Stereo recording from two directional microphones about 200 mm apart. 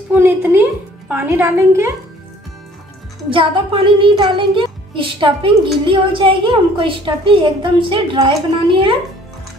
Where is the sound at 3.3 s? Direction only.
25° right (ahead or behind).